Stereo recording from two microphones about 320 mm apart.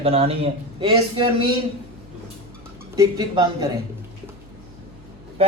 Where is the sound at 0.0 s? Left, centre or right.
Centre.